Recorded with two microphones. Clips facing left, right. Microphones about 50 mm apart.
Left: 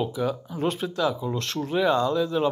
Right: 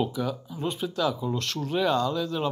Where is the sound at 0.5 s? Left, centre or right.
Left.